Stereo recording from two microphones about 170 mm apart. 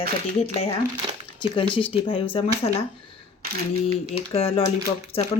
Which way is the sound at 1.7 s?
30° left (ahead or behind).